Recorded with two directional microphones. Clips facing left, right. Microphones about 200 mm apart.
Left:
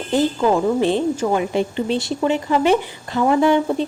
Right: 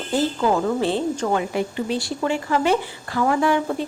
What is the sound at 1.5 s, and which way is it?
A woman's voice, 25° left (ahead or behind).